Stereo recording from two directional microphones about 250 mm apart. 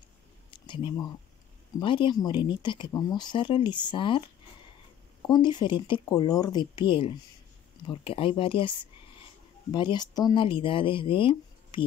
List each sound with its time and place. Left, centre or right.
0.5 s a sound: centre
1.8 s speech: centre
5.2 s speech: centre